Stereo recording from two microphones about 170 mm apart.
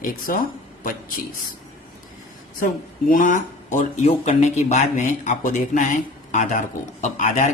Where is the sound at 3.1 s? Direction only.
50° left (ahead or behind).